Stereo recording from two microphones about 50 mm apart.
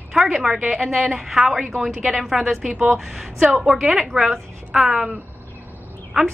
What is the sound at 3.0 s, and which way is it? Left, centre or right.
A woman's voice, centre.